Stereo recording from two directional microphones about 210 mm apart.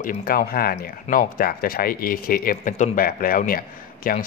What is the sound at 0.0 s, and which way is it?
A man's voice, 45° left (ahead or behind).